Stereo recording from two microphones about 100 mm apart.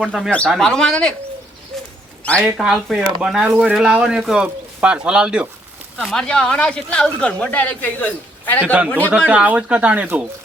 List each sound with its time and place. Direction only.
0.0 s speech: centre (ahead or behind)
0.3 s speech: 10° left (ahead or behind)
2.6 s speech: 5° right (ahead or behind)
6.0 s speech: 5° left (ahead or behind)
8.6 s speech: 15° right (ahead or behind)